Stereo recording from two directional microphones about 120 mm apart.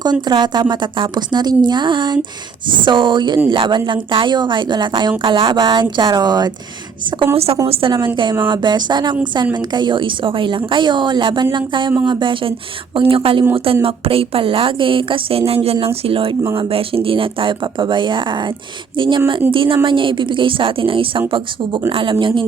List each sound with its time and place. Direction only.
0.0 s a woman's voice: 35° right (ahead or behind)
7.3 s a woman's voice: 55° right (ahead or behind)